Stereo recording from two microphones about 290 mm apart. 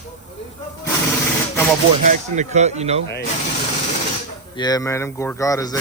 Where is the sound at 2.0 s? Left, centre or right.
Right.